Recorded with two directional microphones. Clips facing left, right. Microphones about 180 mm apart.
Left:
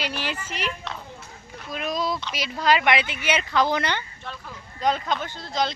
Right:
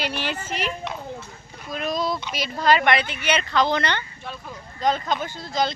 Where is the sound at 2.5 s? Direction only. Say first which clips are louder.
Right 2 dB; centre (ahead or behind).